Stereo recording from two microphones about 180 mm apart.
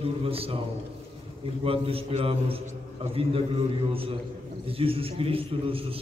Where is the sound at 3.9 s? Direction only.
30° right (ahead or behind).